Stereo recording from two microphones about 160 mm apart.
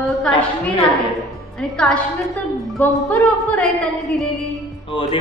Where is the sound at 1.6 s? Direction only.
5° left (ahead or behind).